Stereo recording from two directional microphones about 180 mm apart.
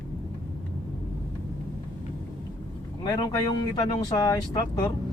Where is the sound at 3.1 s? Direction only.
25° left (ahead or behind).